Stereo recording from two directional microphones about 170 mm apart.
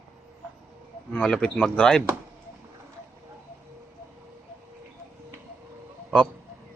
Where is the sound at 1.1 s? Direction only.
5° left (ahead or behind).